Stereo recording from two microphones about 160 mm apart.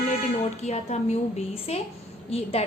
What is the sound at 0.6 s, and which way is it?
A woman's voice, 45° left (ahead or behind).